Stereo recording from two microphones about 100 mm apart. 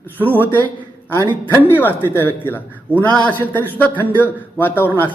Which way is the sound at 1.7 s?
20° left (ahead or behind).